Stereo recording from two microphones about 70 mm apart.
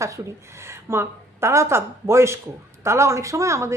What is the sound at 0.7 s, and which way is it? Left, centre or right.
A woman's voice, right.